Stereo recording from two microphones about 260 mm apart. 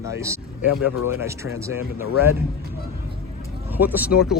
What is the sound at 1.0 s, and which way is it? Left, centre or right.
Speech, centre.